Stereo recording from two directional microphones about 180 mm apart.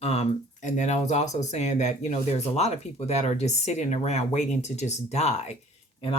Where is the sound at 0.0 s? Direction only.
35° left (ahead or behind).